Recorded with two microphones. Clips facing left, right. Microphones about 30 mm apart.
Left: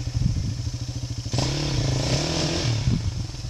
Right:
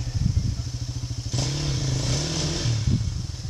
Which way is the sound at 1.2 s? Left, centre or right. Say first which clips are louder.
Left 2 dB; left.